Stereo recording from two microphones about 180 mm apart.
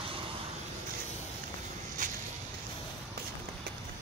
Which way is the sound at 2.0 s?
45° right (ahead or behind).